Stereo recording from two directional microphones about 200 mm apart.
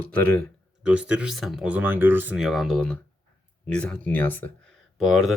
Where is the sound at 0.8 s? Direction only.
5° right (ahead or behind).